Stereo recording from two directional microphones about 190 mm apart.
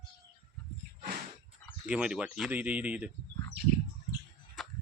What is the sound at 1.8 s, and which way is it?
Speech, 5° right (ahead or behind).